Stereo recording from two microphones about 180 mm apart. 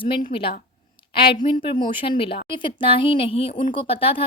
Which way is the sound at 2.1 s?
30° left (ahead or behind).